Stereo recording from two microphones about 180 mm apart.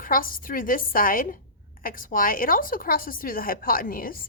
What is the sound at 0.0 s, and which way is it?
A woman's voice, 50° left (ahead or behind).